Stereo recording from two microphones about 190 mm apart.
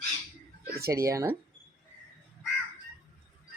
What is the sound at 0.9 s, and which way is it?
Speech, 15° right (ahead or behind).